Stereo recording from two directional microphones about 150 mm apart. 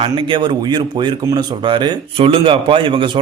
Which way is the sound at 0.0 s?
35° right (ahead or behind).